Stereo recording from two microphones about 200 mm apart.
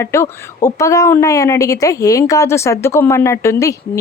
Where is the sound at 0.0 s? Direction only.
15° left (ahead or behind).